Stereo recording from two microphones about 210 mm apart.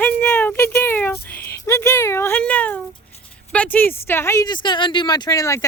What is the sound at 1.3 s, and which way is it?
Speech, 10° left (ahead or behind).